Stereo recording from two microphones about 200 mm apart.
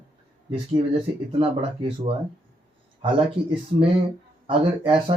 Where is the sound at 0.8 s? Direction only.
30° right (ahead or behind).